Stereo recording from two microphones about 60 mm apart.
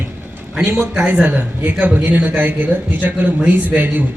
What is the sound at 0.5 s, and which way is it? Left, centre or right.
Speech, centre.